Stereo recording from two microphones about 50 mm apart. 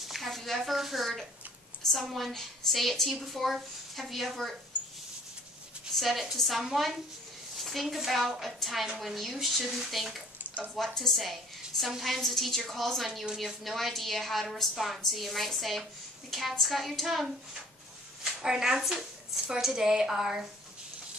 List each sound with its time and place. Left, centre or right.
0.0 s a woman's voice: centre
5.9 s a woman's voice: centre